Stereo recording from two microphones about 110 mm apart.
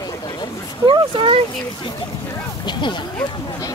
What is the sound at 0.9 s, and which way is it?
Speech, 50° right (ahead or behind).